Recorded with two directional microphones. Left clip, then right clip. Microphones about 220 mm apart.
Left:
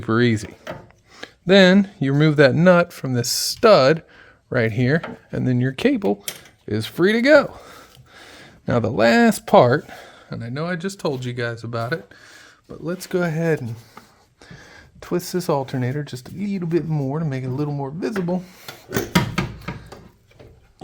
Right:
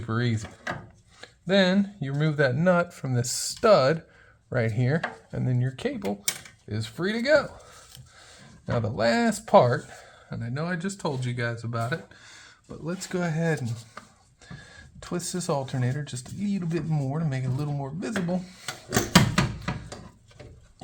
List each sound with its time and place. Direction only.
0.0 s speech: 60° left (ahead or behind); by 18.5 s 40° left (ahead or behind)